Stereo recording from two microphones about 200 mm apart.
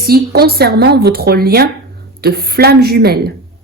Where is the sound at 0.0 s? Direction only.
50° right (ahead or behind).